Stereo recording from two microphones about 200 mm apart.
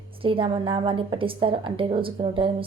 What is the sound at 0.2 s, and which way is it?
A woman's voice, 25° right (ahead or behind).